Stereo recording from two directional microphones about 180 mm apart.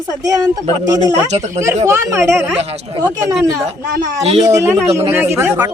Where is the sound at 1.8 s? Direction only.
15° right (ahead or behind).